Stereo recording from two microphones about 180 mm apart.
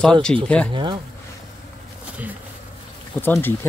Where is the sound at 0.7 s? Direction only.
25° right (ahead or behind).